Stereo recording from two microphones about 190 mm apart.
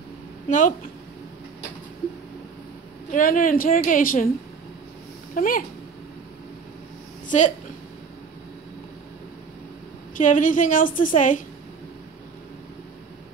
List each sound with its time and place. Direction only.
0.5 s speech: 40° left (ahead or behind)
3.1 s a woman's voice: 45° left (ahead or behind)
5.3 s speech: 45° left (ahead or behind)
7.2 s a woman's voice: 40° left (ahead or behind)
10.1 s a woman's voice: 45° left (ahead or behind)